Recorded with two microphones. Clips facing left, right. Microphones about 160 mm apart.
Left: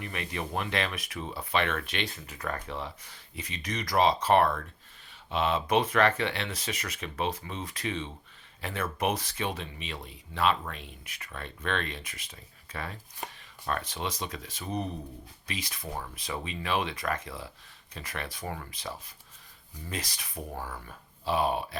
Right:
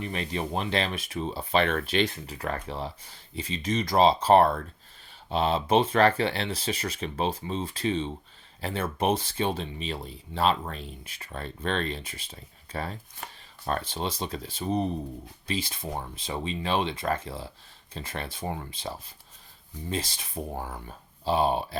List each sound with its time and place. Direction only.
0.0 s speech: 30° right (ahead or behind)